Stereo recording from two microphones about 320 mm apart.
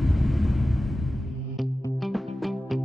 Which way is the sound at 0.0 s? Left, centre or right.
Centre.